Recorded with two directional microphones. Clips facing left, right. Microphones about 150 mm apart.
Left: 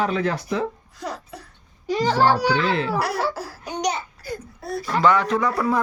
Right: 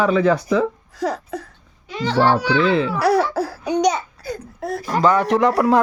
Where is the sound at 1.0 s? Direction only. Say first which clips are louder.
Right 9 dB; 90° right.